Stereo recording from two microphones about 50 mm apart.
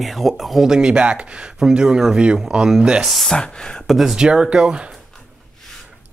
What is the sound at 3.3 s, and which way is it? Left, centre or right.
Speech, centre.